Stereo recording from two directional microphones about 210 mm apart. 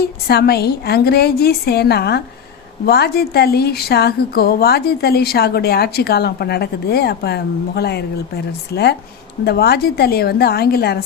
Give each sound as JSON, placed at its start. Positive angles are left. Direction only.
{"t": 0.0, "sound": "a woman's voice", "side_deg": 50}